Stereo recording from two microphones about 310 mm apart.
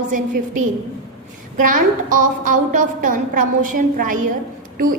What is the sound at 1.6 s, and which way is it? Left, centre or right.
A woman's voice, right.